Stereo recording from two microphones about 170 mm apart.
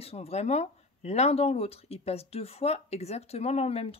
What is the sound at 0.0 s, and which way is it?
Speech, 35° left (ahead or behind).